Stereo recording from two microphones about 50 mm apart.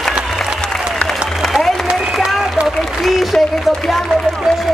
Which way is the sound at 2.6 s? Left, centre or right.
Centre.